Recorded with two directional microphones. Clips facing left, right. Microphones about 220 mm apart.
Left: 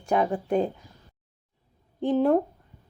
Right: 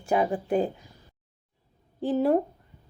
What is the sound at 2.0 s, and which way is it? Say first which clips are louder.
Speech: left 2 dB; 5° right (ahead or behind).